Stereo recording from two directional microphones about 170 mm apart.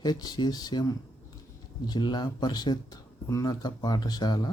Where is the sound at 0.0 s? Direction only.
25° left (ahead or behind).